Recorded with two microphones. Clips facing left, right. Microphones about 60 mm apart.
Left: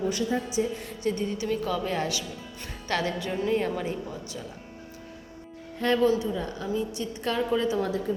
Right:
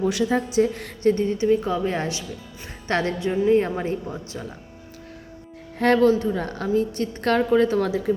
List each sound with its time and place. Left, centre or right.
0.0 s a woman's voice: right
1.0 s a woman's voice: right
2.8 s music: right
3.2 s a woman's voice: right
3.6 s speech: right
5.8 s a woman's voice: right
6.3 s a woman's voice: right
6.9 s a woman's voice: right
7.8 s speech: right